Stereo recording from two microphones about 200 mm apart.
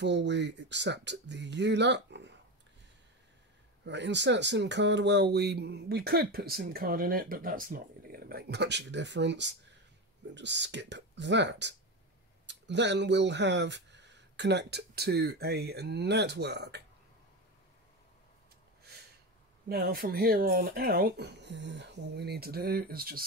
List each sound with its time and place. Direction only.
0.0 s speech: 60° right (ahead or behind)
3.8 s speech: 60° right (ahead or behind)
19.7 s speech: 50° right (ahead or behind)